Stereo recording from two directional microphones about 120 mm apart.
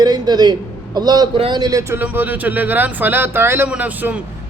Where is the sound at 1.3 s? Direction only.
50° right (ahead or behind).